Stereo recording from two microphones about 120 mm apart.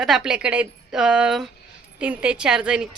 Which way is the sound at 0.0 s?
5° right (ahead or behind).